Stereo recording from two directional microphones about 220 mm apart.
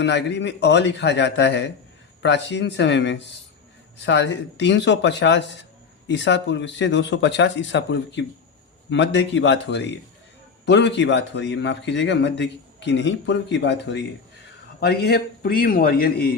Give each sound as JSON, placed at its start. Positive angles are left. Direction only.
{"t": 0.0, "sound": "a man's voice", "side_deg": 50}